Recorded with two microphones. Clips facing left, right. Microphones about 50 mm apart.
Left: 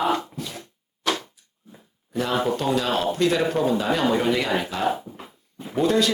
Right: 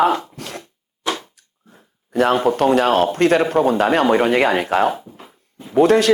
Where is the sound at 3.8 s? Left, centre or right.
Right.